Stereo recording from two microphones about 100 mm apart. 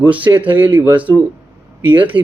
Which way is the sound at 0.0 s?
15° right (ahead or behind).